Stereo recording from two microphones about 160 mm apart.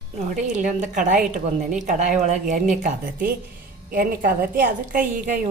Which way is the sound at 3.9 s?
60° right (ahead or behind).